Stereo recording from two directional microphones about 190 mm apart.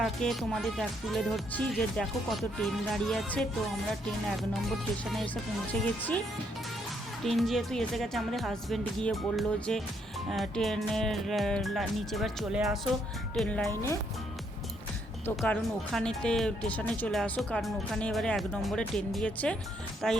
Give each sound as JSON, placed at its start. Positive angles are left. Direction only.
{"t": 0.0, "sound": "speech", "side_deg": 0}
{"t": 5.0, "sound": "speech", "side_deg": 5}
{"t": 7.3, "sound": "speech", "side_deg": 0}
{"t": 13.7, "sound": "speech", "side_deg": 15}
{"t": 15.4, "sound": "speech", "side_deg": 0}